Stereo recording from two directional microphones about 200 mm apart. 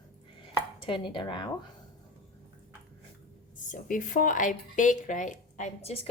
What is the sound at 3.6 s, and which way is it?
Speech, 40° left (ahead or behind).